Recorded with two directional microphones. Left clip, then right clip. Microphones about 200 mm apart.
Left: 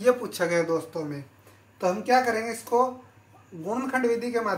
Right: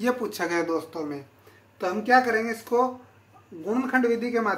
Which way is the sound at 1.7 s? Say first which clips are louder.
Right 1 dB; 40° right (ahead or behind).